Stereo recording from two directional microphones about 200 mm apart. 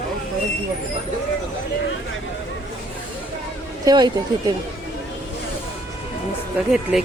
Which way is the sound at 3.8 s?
20° right (ahead or behind).